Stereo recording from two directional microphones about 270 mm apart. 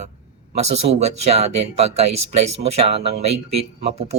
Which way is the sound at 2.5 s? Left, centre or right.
Right.